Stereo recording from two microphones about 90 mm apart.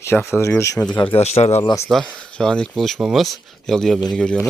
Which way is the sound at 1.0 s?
80° left.